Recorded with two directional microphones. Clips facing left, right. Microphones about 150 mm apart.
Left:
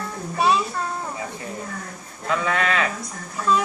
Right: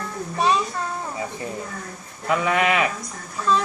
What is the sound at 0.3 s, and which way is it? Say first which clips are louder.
Child singing: left 1 dB; 5° left (ahead or behind).